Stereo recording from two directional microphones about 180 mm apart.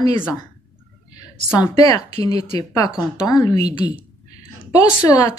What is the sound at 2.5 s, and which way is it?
A woman's voice, 20° left (ahead or behind).